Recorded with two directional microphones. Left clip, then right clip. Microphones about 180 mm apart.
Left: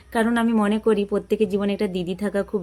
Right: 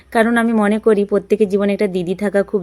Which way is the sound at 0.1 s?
20° right (ahead or behind).